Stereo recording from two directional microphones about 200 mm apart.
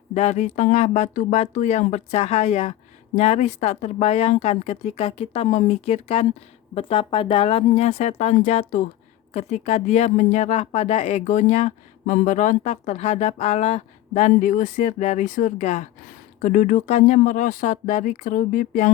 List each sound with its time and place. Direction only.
0.1 s speech: 35° left (ahead or behind)